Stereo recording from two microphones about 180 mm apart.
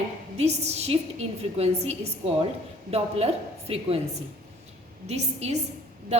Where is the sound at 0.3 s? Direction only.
35° right (ahead or behind).